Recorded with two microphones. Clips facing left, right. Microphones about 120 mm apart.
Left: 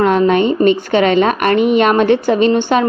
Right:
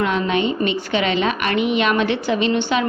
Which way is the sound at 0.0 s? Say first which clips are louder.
Left 8 dB; 45° left (ahead or behind).